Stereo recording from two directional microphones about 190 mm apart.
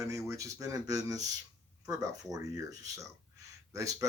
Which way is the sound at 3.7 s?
15° right (ahead or behind).